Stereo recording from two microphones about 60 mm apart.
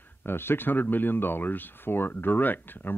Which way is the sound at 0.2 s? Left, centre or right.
Left.